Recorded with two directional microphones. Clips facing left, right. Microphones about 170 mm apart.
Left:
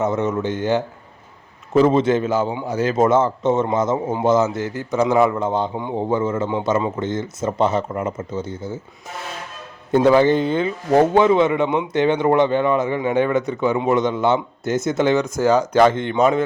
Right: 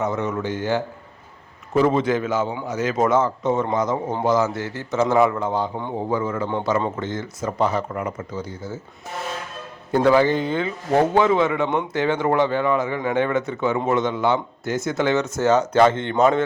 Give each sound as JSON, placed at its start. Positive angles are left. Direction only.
{"t": 0.0, "sound": "speech", "side_deg": 20}
{"t": 9.9, "sound": "speech", "side_deg": 20}
{"t": 15.9, "sound": "speech", "side_deg": -25}
{"t": 16.1, "sound": "speech", "side_deg": 15}